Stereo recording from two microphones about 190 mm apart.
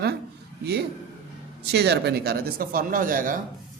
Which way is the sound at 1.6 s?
60° right (ahead or behind).